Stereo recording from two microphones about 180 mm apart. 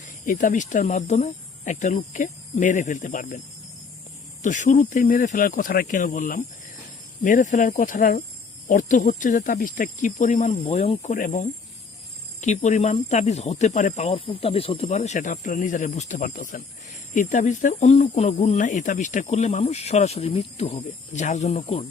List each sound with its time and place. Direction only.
0.0 s speech: 45° left (ahead or behind)
4.4 s speech: 45° left (ahead or behind)